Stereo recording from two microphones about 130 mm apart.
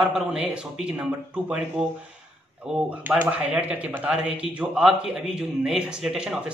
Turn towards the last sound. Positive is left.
turn(degrees=-5)  # may be behind; listen again after turning